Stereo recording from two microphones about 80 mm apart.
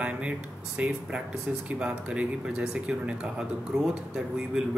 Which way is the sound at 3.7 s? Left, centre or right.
Centre.